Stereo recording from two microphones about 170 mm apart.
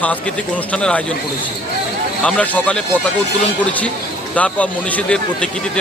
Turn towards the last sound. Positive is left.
turn(degrees=5)  # may be behind; listen again after turning